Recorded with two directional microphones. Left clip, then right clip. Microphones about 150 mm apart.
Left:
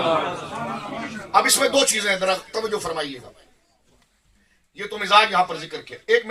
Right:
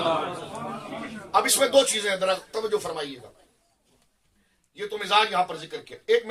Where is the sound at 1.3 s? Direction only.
35° right (ahead or behind).